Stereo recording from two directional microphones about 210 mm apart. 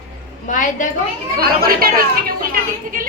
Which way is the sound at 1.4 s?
45° right (ahead or behind).